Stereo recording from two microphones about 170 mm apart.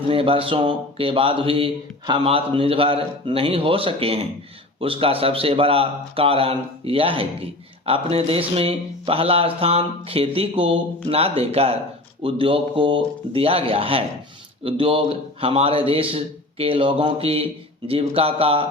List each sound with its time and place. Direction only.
0.1 s speech: 30° right (ahead or behind)